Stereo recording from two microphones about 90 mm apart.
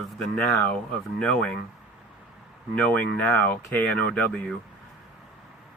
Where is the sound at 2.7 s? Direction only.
15° left (ahead or behind).